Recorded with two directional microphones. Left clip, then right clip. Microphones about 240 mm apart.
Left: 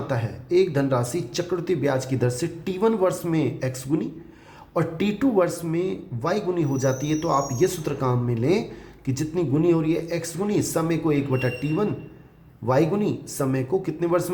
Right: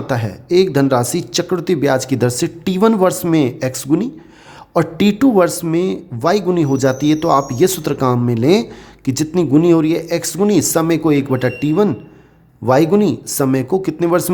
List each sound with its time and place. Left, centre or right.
0.1 s speech: right